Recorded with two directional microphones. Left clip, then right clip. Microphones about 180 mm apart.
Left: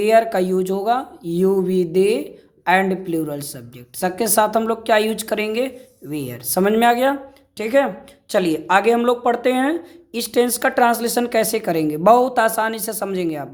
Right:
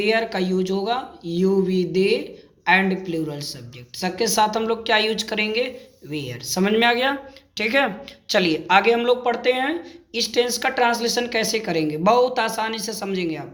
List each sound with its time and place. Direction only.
0.0 s a woman's voice: 45° left (ahead or behind)